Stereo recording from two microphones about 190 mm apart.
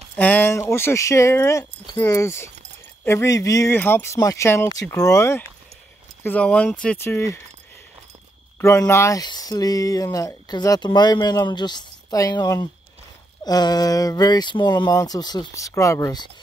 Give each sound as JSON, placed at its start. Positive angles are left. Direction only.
{"t": 0.1, "sound": "speech", "side_deg": 10}
{"t": 8.5, "sound": "speech", "side_deg": 15}